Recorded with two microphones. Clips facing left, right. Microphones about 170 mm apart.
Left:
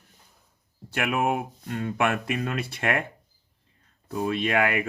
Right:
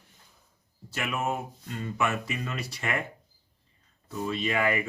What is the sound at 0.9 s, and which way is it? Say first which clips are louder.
Speech: left 5 dB; 60° left (ahead or behind).